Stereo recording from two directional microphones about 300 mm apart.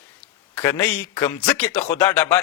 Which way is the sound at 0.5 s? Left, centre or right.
Centre.